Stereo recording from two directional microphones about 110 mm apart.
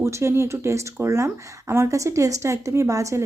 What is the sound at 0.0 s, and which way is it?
Speech, 25° right (ahead or behind).